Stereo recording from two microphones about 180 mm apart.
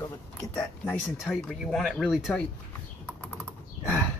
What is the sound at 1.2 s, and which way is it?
Speech, centre (ahead or behind).